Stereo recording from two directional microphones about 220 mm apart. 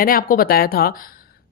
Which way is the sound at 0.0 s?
40° left (ahead or behind).